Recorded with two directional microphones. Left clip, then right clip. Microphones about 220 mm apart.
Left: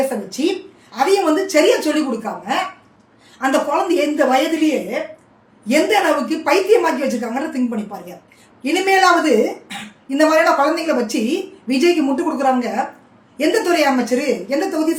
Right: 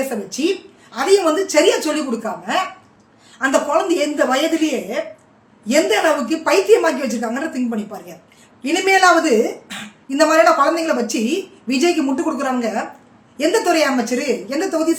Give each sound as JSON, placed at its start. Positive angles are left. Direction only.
{"t": 0.3, "sound": "a woman's voice", "side_deg": -10}
{"t": 3.3, "sound": "a woman's voice", "side_deg": -10}
{"t": 8.6, "sound": "a woman's voice", "side_deg": -10}